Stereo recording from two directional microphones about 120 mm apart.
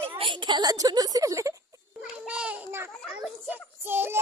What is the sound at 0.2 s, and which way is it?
A woman's voice, 40° right (ahead or behind).